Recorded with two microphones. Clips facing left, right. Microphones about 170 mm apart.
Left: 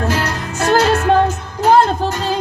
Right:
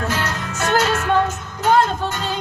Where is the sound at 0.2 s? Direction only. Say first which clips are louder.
Left 4 dB; 35° left (ahead or behind).